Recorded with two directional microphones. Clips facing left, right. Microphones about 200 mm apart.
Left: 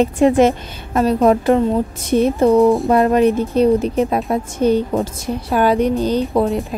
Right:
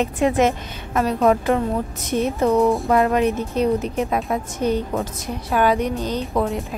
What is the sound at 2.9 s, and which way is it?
A woman's voice, 35° left (ahead or behind).